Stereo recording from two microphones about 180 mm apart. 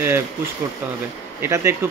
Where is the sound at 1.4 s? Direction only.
15° right (ahead or behind).